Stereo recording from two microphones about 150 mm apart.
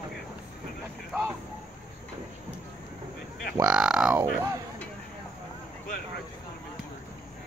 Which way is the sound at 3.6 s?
5° right (ahead or behind).